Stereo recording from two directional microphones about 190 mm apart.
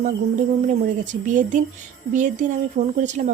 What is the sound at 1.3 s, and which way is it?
Speech, 40° right (ahead or behind).